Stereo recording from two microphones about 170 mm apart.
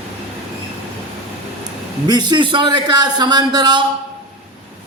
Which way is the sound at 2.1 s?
25° right (ahead or behind).